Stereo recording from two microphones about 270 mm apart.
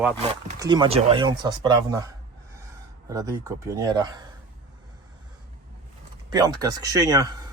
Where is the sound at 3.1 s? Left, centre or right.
Centre.